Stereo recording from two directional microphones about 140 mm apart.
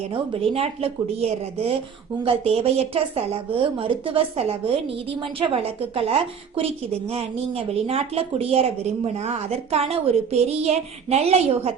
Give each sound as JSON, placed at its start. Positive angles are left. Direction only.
{"t": 0.1, "sound": "a woman's voice", "side_deg": -45}